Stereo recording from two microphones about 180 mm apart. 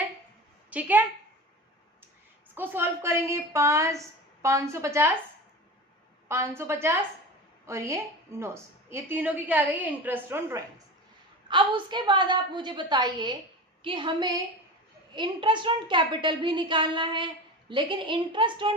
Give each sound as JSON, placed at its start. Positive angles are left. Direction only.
{"t": 0.7, "sound": "a woman's voice", "side_deg": -10}
{"t": 2.6, "sound": "a woman's voice", "side_deg": -10}
{"t": 6.2, "sound": "a woman's voice", "side_deg": -15}
{"t": 11.4, "sound": "a woman's voice", "side_deg": -25}